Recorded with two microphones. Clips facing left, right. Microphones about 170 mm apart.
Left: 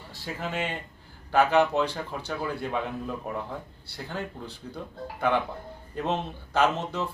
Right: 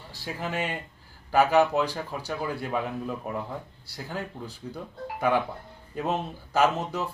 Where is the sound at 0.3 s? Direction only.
10° right (ahead or behind).